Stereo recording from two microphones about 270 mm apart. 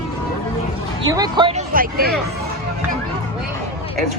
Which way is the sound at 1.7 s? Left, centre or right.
Right.